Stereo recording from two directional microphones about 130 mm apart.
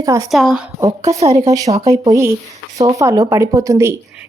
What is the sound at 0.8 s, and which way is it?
Speech, 25° right (ahead or behind).